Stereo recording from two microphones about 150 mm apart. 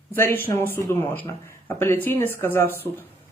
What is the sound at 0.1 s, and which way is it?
Speech, 15° left (ahead or behind).